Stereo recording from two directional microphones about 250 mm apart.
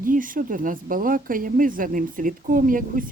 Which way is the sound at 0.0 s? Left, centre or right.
Right.